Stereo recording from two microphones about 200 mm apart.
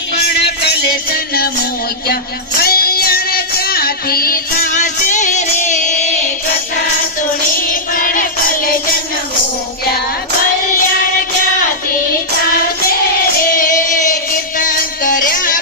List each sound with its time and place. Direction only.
0.2 s music: 55° left (ahead or behind)
2.6 s music: 50° left (ahead or behind)
7.7 s music: 45° left (ahead or behind)
13.6 s music: 40° left (ahead or behind)